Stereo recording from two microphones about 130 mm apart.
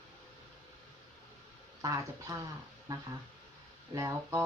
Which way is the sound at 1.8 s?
25° right (ahead or behind).